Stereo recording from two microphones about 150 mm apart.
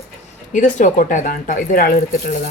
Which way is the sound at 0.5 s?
55° left (ahead or behind).